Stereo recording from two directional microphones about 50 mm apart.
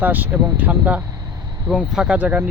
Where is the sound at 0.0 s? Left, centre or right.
Right.